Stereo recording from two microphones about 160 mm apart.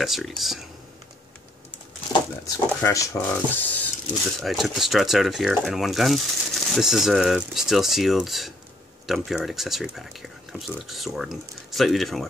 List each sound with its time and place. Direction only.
0.0 s speech: centre (ahead or behind)
2.4 s speech: 20° left (ahead or behind); by 12.3 s centre (ahead or behind)